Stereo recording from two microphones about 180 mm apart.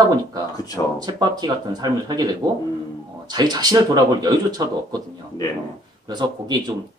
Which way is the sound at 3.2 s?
20° right (ahead or behind).